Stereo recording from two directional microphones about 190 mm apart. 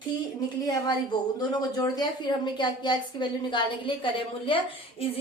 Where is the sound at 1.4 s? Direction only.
20° left (ahead or behind).